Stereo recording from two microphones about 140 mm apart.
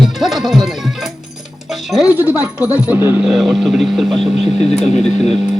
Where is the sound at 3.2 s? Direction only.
Centre (ahead or behind).